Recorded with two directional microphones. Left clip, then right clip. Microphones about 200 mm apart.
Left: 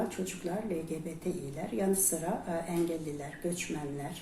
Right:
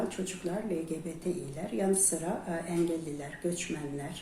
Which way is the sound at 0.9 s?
5° right (ahead or behind).